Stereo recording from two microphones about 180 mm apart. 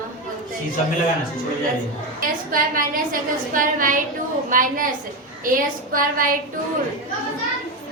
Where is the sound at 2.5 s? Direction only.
50° right (ahead or behind).